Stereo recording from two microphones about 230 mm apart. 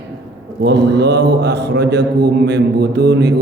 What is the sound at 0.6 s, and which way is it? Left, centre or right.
Mantra, right.